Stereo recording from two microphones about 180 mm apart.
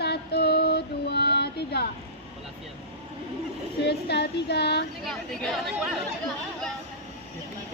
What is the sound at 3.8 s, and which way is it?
Female singing, 65° left (ahead or behind).